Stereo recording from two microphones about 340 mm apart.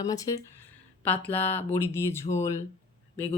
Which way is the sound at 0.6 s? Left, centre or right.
Centre.